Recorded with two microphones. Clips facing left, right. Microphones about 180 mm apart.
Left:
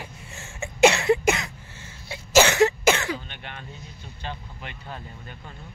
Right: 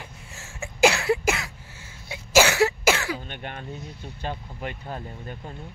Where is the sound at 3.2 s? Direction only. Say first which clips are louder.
Right 4 dB; 45° right (ahead or behind).